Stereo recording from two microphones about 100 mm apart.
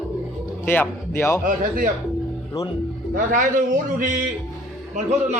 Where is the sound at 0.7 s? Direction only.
20° left (ahead or behind).